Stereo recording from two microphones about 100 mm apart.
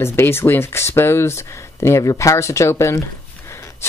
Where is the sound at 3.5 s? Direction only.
30° left (ahead or behind).